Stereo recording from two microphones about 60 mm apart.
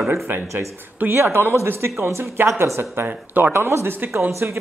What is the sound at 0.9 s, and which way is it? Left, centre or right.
Speech, right.